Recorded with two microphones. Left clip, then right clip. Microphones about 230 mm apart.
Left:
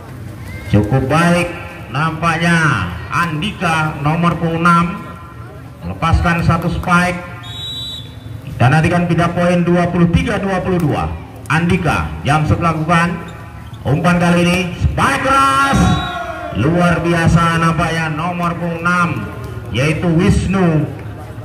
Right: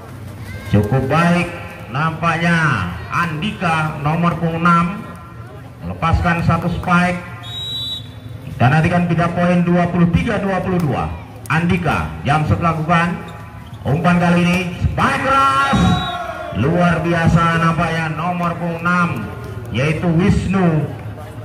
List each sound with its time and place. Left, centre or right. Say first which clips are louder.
0.7 s a man's voice: left 2 dB; left
5.9 s a man's voice: left 2 dB; left
8.5 s a man's voice: left 2 dB; left